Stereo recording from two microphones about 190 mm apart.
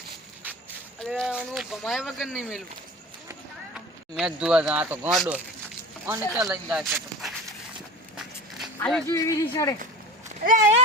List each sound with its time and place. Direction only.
0.4 s a sound: 10° right (ahead or behind)
0.9 s speech: centre (ahead or behind)
4.1 s speech: centre (ahead or behind)
8.1 s walk: centre (ahead or behind)
8.8 s speech: centre (ahead or behind)
9.0 s speech: 15° left (ahead or behind)
10.2 s speech: 40° right (ahead or behind)